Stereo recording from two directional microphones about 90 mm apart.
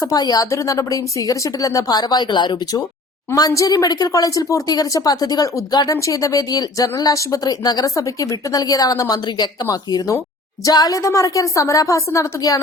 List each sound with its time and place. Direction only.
0.1 s a woman's voice: 45° left (ahead or behind)
0.5 s a woman's voice: 35° left (ahead or behind); by 2.8 s 55° left (ahead or behind)
3.3 s a woman's voice: 40° left (ahead or behind)
9.6 s a woman's voice: 35° left (ahead or behind)